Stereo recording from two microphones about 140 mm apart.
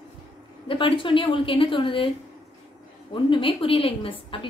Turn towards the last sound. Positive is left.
turn(degrees=40)  # may be behind; listen again after turning